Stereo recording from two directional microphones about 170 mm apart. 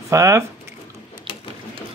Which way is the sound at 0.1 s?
15° right (ahead or behind).